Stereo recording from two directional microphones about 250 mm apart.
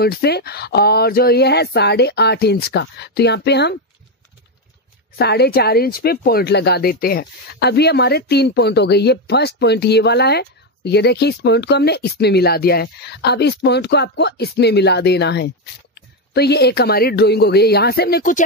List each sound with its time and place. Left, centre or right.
0.0 s speech: left
5.1 s speech: left